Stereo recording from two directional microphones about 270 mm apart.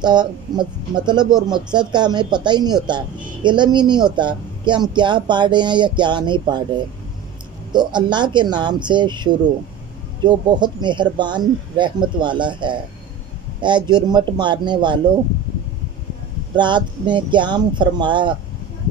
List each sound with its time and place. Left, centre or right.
0.0 s speech: centre
16.5 s speech: centre